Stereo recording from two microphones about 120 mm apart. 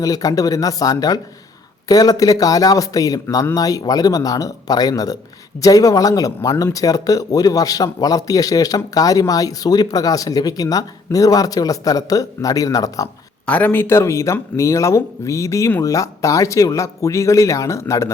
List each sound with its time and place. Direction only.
0.0 s speech: 30° left (ahead or behind)
13.4 s speech: 15° left (ahead or behind)